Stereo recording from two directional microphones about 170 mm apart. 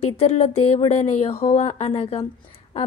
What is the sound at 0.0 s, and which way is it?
A woman's voice, 35° left (ahead or behind).